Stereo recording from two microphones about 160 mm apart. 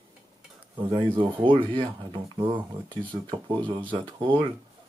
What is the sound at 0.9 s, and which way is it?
Speech, 30° right (ahead or behind).